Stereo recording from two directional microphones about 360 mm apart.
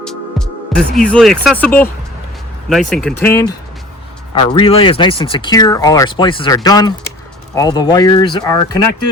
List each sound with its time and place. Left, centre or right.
0.0 s speech: centre